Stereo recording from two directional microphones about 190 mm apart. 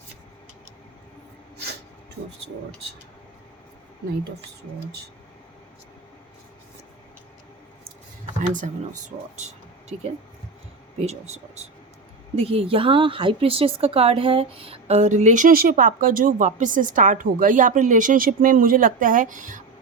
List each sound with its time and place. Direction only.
8.4 s a woman's voice: 40° right (ahead or behind)